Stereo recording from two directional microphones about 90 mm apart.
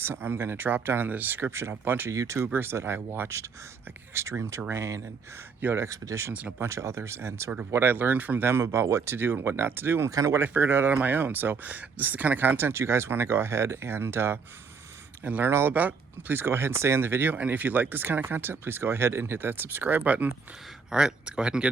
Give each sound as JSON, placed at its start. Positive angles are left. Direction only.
{"t": 0.0, "sound": "speech", "side_deg": -25}
{"t": 2.1, "sound": "speech", "side_deg": -35}
{"t": 6.3, "sound": "speech", "side_deg": -20}
{"t": 6.7, "sound": "speech", "side_deg": -35}
{"t": 8.6, "sound": "speech", "side_deg": -35}
{"t": 10.1, "sound": "speech", "side_deg": -35}
{"t": 10.4, "sound": "speech", "side_deg": -25}
{"t": 20.9, "sound": "speech", "side_deg": -10}